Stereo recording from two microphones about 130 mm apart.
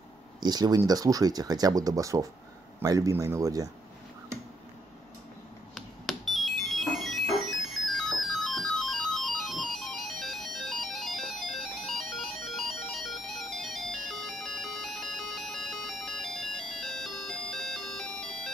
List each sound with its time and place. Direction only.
0.4 s speech: 30° right (ahead or behind)
5.8 s ringtone: centre (ahead or behind)
7.6 s music: centre (ahead or behind)